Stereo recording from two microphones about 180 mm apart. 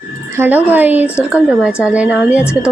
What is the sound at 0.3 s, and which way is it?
A woman's voice, 10° right (ahead or behind).